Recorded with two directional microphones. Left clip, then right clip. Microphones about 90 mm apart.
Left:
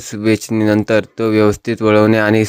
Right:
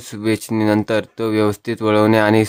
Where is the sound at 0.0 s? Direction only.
30° left (ahead or behind).